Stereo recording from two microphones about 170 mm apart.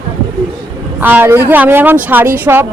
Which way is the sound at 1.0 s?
10° right (ahead or behind).